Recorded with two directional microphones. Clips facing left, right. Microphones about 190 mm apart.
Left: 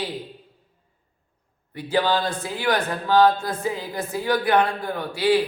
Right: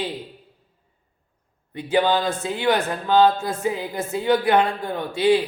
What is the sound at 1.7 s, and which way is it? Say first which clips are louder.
Speech: right 2 dB; 20° right (ahead or behind).